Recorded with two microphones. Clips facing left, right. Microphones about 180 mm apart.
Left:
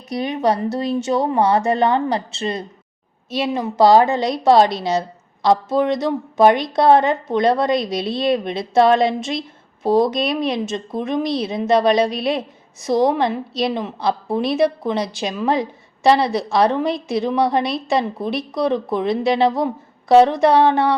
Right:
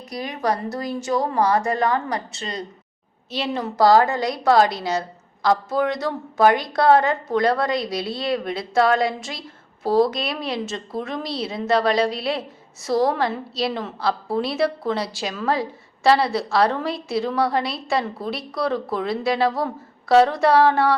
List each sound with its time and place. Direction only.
0.1 s a woman's voice: 25° left (ahead or behind)